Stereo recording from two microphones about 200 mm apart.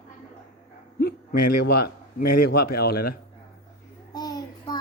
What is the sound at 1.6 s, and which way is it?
Speech, 50° left (ahead or behind).